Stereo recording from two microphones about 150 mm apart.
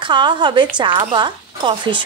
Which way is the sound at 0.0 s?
30° right (ahead or behind).